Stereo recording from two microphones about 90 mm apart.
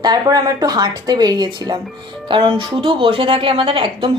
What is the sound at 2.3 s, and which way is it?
A woman's voice, 65° right (ahead or behind).